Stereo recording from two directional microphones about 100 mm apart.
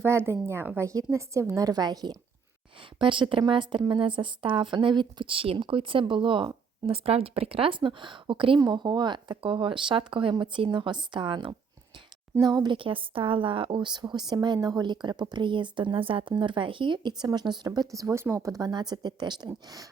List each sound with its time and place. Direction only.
0.0 s speech: 25° right (ahead or behind); by 2.1 s 40° right (ahead or behind)
3.0 s a woman's voice: 55° right (ahead or behind)
8.6 s a woman's voice: 45° right (ahead or behind)
17.7 s speech: 35° right (ahead or behind)